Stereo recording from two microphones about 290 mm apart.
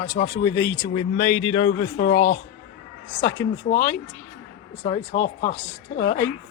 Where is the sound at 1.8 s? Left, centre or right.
Left.